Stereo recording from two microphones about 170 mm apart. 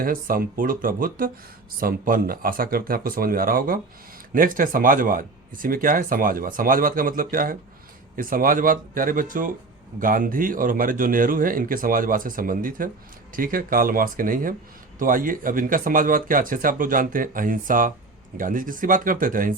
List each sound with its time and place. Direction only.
0.0 s speech: 55° right (ahead or behind)